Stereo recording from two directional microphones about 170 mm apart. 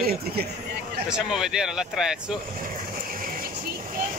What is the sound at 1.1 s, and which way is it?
Speech, 5° right (ahead or behind).